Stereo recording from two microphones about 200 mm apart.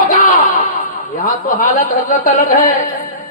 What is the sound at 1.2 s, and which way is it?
A man's voice, 40° left (ahead or behind).